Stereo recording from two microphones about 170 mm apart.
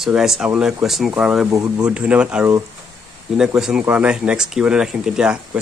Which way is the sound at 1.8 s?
5° right (ahead or behind).